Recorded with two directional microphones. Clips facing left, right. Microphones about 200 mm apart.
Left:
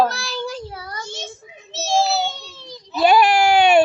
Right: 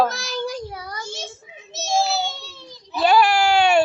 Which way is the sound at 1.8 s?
35° left (ahead or behind).